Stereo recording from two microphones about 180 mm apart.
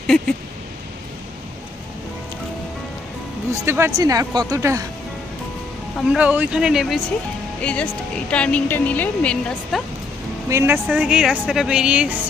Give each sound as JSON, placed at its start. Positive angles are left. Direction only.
{"t": 3.5, "sound": "speech", "side_deg": -15}
{"t": 6.1, "sound": "speech", "side_deg": -5}
{"t": 10.5, "sound": "speech", "side_deg": -15}
{"t": 10.8, "sound": "speech", "side_deg": -5}